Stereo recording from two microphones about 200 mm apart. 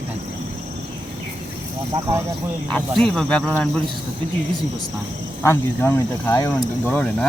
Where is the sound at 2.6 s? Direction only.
5° left (ahead or behind).